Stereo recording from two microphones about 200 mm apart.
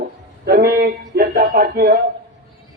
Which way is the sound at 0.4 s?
50° right (ahead or behind).